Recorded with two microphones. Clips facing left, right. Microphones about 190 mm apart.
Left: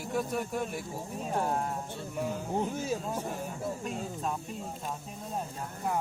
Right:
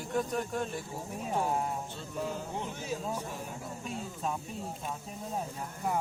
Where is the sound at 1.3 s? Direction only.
5° right (ahead or behind).